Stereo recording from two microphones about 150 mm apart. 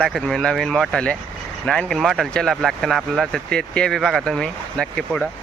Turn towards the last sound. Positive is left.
turn(degrees=5)  # may be behind; listen again after turning